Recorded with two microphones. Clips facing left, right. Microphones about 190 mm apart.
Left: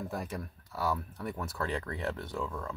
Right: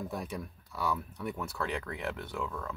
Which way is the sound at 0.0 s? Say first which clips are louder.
Even; centre (ahead or behind).